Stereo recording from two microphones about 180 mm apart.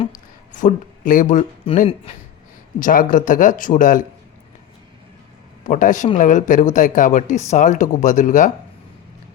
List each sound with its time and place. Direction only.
0.5 s speech: 45° left (ahead or behind)
2.7 s speech: 50° left (ahead or behind)
5.6 s speech: 45° left (ahead or behind)